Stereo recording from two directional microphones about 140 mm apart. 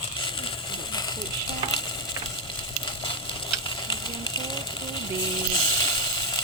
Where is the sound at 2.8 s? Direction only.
35° left (ahead or behind).